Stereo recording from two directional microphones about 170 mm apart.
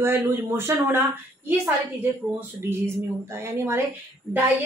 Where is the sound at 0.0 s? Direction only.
15° right (ahead or behind).